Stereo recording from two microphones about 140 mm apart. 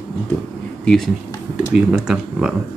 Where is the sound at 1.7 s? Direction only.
5° right (ahead or behind).